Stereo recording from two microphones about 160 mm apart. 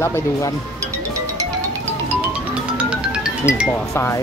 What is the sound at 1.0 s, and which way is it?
Music, 20° right (ahead or behind).